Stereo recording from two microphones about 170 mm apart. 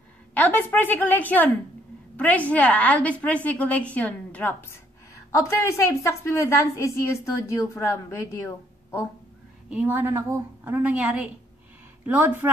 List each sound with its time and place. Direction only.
0.3 s a woman's voice: 10° left (ahead or behind)
9.7 s a woman's voice: 10° right (ahead or behind)